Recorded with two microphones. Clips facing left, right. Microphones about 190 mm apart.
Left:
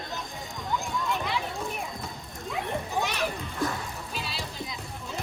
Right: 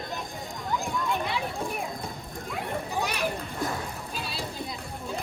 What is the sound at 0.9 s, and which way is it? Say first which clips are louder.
Children playing: right 1 dB; centre (ahead or behind).